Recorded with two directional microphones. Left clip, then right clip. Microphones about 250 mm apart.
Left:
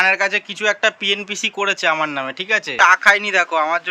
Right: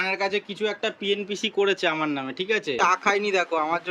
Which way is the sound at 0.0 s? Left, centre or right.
Centre.